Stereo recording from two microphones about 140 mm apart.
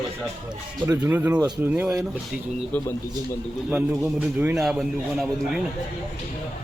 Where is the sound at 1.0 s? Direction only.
15° right (ahead or behind).